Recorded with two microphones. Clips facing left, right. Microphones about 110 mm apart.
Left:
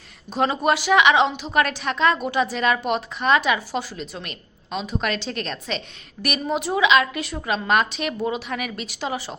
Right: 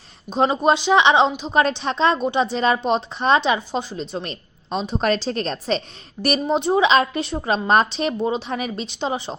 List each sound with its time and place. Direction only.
0.3 s a woman's voice: 20° right (ahead or behind)